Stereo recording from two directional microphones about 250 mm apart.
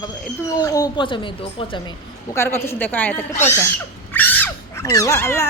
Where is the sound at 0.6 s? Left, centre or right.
Centre.